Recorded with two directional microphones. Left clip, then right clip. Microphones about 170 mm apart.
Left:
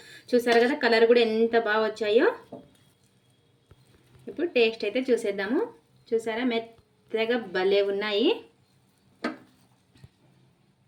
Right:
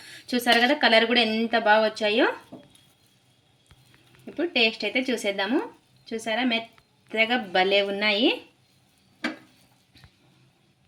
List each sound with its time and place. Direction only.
0.1 s speech: 30° right (ahead or behind)
4.4 s a woman's voice: 30° right (ahead or behind)